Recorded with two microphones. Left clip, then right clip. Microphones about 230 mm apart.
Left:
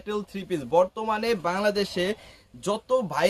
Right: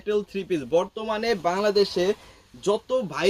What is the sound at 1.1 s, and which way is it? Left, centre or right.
Speech, left.